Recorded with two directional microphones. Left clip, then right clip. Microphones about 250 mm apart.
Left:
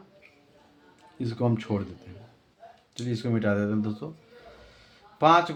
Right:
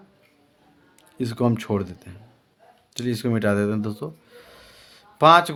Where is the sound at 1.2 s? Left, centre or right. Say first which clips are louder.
Right 5 dB; right.